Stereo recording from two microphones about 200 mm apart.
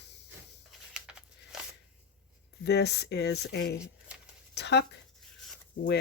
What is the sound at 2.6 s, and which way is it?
Speech, 55° left (ahead or behind).